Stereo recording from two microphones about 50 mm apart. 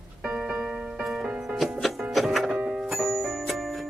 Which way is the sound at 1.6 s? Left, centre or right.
Centre.